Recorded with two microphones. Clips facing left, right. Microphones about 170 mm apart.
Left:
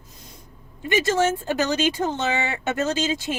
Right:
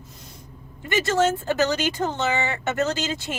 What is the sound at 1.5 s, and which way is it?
A woman's voice, 15° left (ahead or behind).